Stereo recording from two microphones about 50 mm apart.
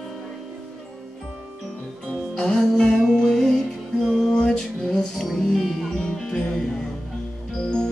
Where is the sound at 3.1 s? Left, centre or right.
Centre.